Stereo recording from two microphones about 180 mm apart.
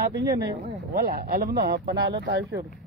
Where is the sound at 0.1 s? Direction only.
70° right (ahead or behind).